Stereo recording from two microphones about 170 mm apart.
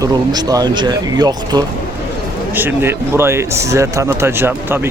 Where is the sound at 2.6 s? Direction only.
10° right (ahead or behind).